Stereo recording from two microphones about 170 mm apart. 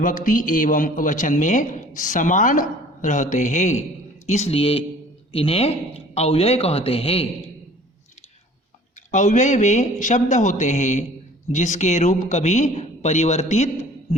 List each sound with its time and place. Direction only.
0.0 s a man's voice: 50° left (ahead or behind); by 7.3 s 35° left (ahead or behind)
9.1 s a man's voice: 45° left (ahead or behind)